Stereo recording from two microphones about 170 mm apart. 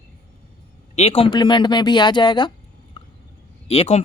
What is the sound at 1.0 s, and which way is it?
Speech, 35° left (ahead or behind).